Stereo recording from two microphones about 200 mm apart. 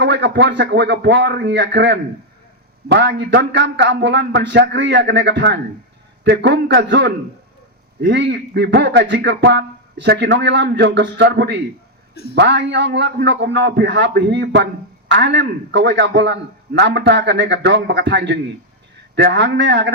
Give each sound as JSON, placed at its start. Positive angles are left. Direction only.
{"t": 0.0, "sound": "a man's voice", "side_deg": -60}